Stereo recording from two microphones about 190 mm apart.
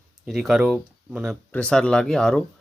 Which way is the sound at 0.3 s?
Centre (ahead or behind).